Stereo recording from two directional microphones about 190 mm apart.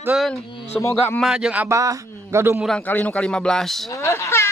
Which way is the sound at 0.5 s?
35° left (ahead or behind).